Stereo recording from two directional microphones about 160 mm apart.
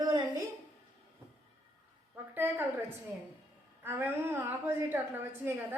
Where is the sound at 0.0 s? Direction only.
25° right (ahead or behind).